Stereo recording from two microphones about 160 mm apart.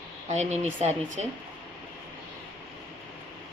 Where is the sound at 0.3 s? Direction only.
45° right (ahead or behind).